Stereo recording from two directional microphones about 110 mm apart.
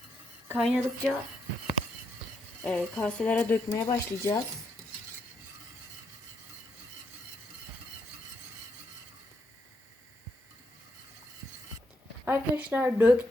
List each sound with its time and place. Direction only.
0.6 s speech: centre (ahead or behind)
2.6 s speech: 10° left (ahead or behind)
3.8 s speech: 30° left (ahead or behind)
12.2 s speech: 15° right (ahead or behind)